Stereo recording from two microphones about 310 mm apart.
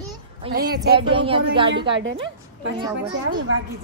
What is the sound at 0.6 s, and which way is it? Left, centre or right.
Speech, right.